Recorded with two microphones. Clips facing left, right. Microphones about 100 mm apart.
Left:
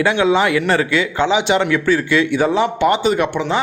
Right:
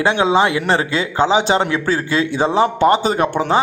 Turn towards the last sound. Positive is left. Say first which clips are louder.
# even
turn(degrees=-40)  # may be behind; listen again after turning